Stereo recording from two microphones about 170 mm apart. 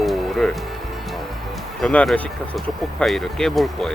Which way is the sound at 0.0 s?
Centre (ahead or behind).